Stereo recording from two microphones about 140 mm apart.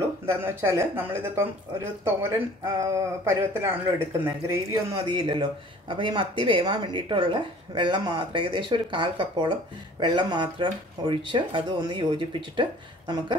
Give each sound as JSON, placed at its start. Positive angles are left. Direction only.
{"t": 0.3, "sound": "speech", "side_deg": -15}
{"t": 4.9, "sound": "speech", "side_deg": -35}